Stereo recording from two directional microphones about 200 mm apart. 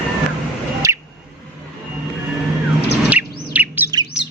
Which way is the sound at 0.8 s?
15° right (ahead or behind).